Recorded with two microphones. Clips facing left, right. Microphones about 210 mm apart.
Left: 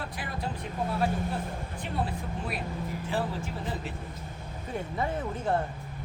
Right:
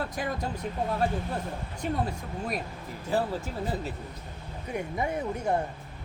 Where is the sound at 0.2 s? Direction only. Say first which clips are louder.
Right 7 dB; 40° right (ahead or behind).